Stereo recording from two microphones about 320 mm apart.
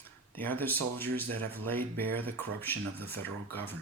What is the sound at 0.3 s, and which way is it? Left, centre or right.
Speech, centre.